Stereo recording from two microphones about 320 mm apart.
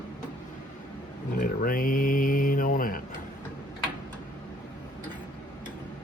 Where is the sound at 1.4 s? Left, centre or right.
Left.